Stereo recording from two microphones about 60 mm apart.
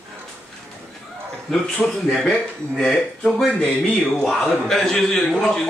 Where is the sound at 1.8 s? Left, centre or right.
Centre.